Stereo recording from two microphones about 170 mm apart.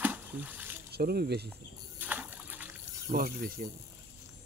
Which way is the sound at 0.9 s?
60° right (ahead or behind).